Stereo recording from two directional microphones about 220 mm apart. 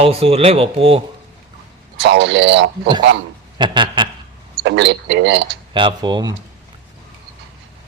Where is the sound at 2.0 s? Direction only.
50° right (ahead or behind).